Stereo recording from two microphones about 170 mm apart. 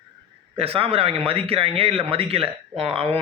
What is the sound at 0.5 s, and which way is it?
Speech, 35° right (ahead or behind).